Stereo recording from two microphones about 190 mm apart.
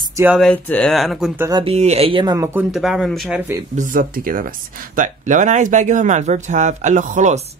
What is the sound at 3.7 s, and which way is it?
Speech, 45° right (ahead or behind).